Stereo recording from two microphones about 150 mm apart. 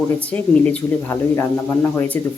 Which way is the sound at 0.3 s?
10° left (ahead or behind).